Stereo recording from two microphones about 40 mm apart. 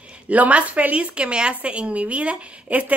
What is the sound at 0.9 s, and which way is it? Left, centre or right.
A woman's voice, right.